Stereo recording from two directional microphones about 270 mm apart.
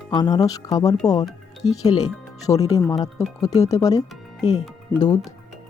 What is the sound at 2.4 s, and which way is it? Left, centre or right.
Speech, centre.